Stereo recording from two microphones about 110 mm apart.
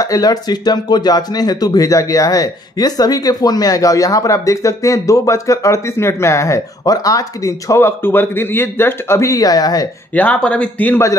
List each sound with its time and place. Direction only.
0.0 s speech: 35° left (ahead or behind)
10.1 s a man's voice: 10° left (ahead or behind)